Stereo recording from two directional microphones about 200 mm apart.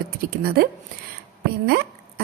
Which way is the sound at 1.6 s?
55° right (ahead or behind).